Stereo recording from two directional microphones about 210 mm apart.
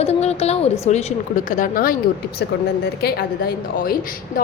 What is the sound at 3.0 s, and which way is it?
Speech, 50° left (ahead or behind).